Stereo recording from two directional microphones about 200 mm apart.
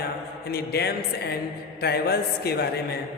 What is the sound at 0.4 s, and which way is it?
A man's voice, 50° left (ahead or behind).